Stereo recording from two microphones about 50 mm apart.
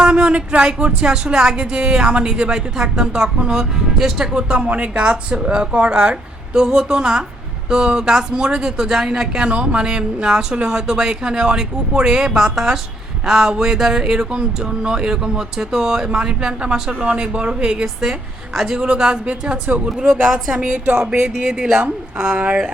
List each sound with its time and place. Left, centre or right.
0.0 s speech: centre